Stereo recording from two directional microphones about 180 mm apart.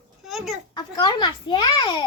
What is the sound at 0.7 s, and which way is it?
A child's voice, 25° left (ahead or behind).